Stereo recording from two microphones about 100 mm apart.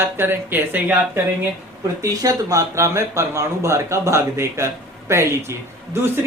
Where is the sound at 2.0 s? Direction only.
35° right (ahead or behind).